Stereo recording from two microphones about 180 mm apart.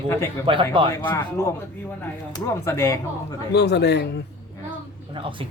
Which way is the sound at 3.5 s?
70° left (ahead or behind).